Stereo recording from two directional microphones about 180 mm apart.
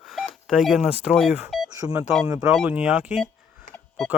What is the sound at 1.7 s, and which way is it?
Telephone dialing, 20° right (ahead or behind).